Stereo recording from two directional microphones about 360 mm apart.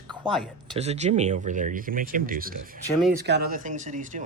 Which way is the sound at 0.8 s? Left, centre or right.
Centre.